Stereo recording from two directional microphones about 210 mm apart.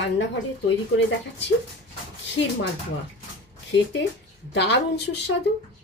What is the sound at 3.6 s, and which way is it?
A woman's voice, 60° left (ahead or behind).